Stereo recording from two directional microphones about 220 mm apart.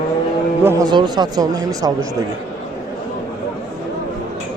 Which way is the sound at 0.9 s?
20° right (ahead or behind).